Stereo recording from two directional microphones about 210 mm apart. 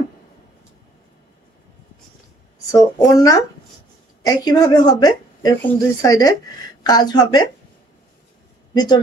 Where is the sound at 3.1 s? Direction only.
15° left (ahead or behind).